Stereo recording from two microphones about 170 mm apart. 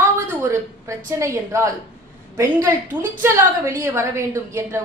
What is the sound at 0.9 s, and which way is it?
A woman's voice, 15° right (ahead or behind).